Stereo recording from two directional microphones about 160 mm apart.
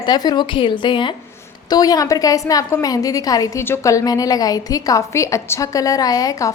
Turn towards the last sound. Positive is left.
turn(degrees=20)  # may be behind; listen again after turning